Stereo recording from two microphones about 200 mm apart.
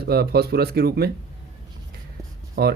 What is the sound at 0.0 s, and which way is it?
Speech, 50° right (ahead or behind).